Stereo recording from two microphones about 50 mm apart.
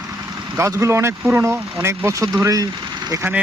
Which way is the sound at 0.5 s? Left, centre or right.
Right.